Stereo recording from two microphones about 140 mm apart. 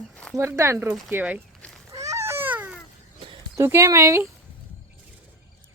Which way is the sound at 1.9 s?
25° right (ahead or behind).